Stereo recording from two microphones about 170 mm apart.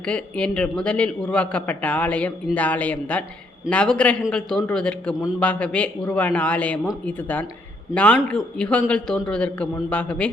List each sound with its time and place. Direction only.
0.0 s a man's voice: 5° left (ahead or behind)